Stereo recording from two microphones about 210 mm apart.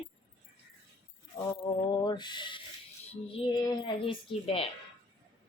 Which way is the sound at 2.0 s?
20° left (ahead or behind).